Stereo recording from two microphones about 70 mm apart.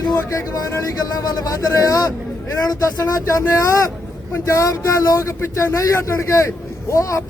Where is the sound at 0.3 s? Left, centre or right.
Left.